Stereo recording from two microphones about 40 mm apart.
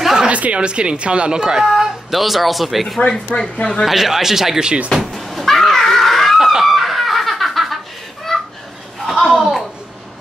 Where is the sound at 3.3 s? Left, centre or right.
Left.